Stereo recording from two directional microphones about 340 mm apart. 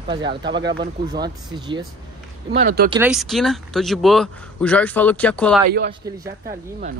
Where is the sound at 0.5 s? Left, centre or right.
Right.